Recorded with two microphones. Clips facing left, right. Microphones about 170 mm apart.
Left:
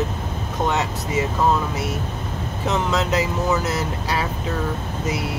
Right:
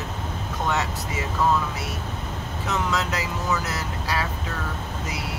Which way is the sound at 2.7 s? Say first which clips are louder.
Left 5 dB; 25° left (ahead or behind).